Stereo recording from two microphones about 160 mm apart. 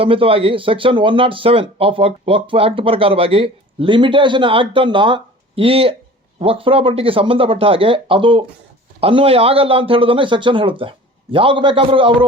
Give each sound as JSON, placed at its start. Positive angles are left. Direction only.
{"t": 0.0, "sound": "speech", "side_deg": -35}